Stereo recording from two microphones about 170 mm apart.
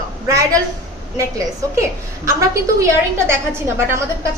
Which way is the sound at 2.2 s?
15° right (ahead or behind).